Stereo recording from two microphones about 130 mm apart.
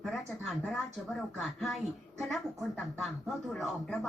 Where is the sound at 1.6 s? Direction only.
Centre (ahead or behind).